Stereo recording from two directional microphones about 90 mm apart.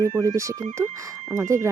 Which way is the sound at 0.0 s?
35° right (ahead or behind).